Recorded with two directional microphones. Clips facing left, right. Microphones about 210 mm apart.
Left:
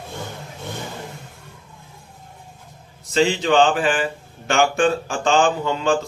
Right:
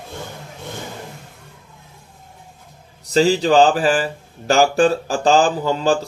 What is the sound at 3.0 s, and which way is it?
Speech, 40° right (ahead or behind).